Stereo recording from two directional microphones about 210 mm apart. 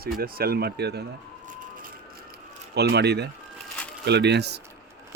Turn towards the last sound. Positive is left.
turn(degrees=-50)  # may be behind; listen again after turning